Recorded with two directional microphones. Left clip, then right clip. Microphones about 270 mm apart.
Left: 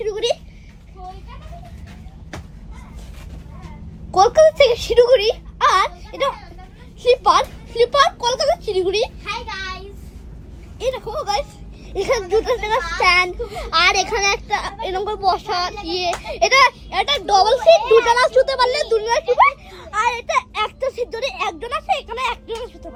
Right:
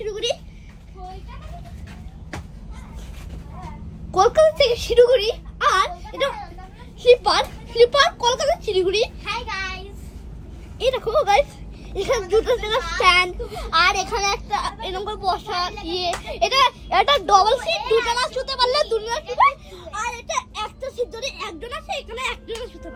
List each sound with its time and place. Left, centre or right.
0.0 s a sound: centre
4.1 s speech: centre
8.9 s a sound: centre
11.1 s a child's voice: centre
11.9 s speech: centre
16.3 s a child's voice: centre
17.2 s speech: centre
17.7 s speech: left
18.1 s speech: centre
20.1 s a child's voice: centre
20.9 s speech: centre